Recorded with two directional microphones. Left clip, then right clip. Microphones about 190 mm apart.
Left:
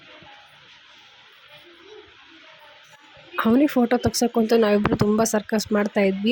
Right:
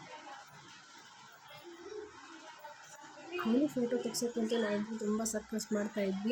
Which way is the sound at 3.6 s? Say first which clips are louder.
Left 14 dB; 50° left (ahead or behind).